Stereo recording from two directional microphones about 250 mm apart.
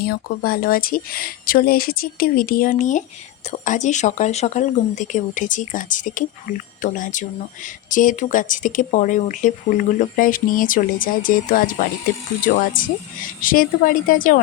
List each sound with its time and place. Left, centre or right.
0.0 s speech: left
12.8 s speech: left